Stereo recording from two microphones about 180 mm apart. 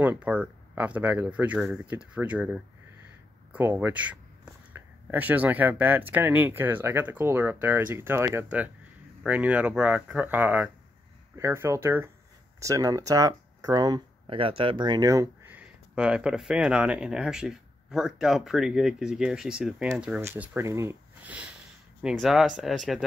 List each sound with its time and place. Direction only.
0.0 s speech: 10° right (ahead or behind)